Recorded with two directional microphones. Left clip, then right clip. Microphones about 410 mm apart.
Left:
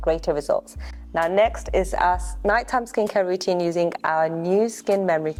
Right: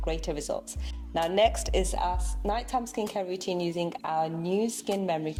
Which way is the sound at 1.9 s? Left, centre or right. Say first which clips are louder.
Left 10 dB; left.